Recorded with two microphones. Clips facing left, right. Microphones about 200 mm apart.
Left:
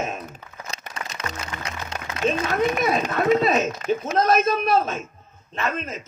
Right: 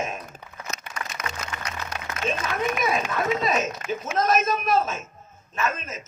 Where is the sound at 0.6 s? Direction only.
35° left (ahead or behind).